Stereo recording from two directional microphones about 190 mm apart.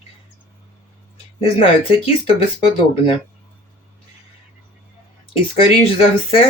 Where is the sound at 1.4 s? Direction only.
30° left (ahead or behind).